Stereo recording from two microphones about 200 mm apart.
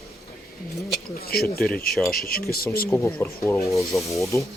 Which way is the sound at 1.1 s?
50° left (ahead or behind).